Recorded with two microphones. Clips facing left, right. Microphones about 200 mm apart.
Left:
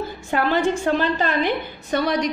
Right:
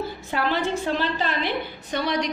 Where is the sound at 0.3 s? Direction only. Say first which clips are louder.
Left 5 dB; 50° left (ahead or behind).